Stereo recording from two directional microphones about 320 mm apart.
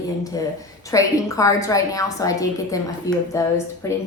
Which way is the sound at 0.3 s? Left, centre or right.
Centre.